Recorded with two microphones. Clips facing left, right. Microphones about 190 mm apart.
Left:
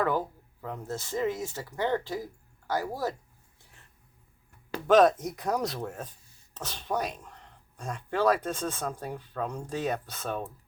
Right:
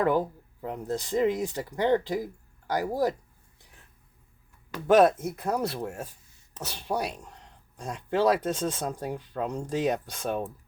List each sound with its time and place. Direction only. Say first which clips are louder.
0.0 s speech: right 3 dB; 15° right (ahead or behind)
4.9 s speech: right 1 dB; 10° right (ahead or behind)